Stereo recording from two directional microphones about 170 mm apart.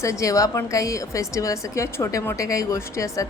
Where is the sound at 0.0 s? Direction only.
20° left (ahead or behind).